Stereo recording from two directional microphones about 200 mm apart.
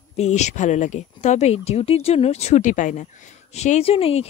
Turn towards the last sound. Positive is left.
turn(degrees=30)  # may be behind; listen again after turning